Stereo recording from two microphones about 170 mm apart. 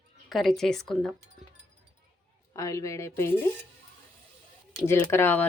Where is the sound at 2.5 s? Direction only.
20° left (ahead or behind).